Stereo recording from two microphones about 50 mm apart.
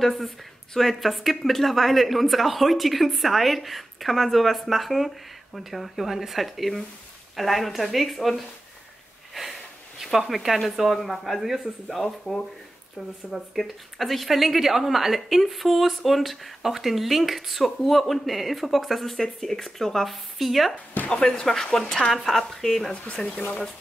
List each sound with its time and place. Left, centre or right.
0.0 s speech: centre
9.3 s sniff: centre
10.0 s speech: centre
20.7 s speech: left
21.2 s speech: centre
23.0 s speech: centre